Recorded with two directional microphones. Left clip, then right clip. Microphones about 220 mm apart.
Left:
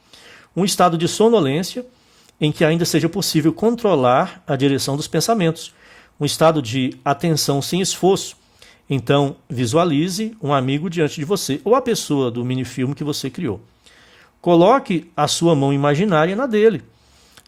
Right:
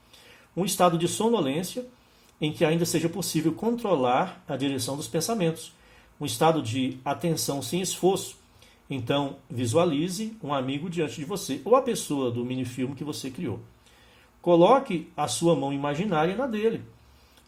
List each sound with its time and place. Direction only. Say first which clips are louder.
0.5 s speech: left 7 dB; 45° left (ahead or behind)